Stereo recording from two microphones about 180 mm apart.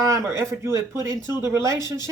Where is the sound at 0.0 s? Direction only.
15° right (ahead or behind).